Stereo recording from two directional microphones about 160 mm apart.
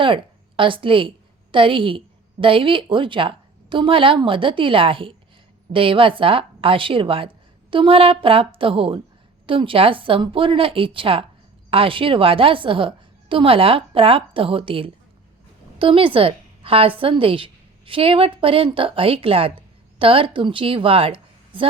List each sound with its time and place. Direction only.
0.0 s a woman's voice: 30° right (ahead or behind)